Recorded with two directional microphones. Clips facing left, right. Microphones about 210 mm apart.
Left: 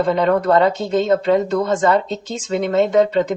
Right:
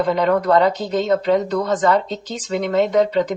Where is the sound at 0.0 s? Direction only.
25° left (ahead or behind).